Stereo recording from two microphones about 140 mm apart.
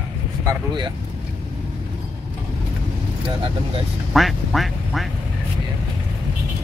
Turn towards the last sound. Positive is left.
turn(degrees=0)  # may be behind; listen again after turning